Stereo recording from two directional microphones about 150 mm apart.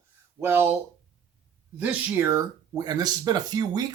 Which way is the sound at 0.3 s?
15° right (ahead or behind).